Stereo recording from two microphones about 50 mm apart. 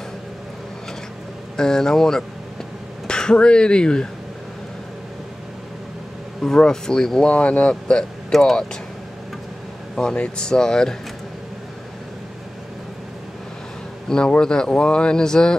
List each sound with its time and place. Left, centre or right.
1.6 s speech: centre
6.4 s speech: centre
7.2 s speech: left
9.9 s speech: left
14.0 s speech: centre